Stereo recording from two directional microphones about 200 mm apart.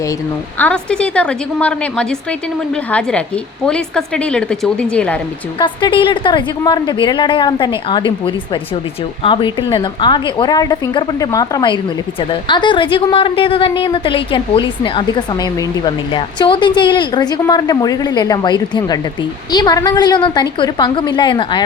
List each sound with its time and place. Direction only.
0.6 s a woman's voice: 5° left (ahead or behind)
5.5 s a woman's voice: 25° left (ahead or behind)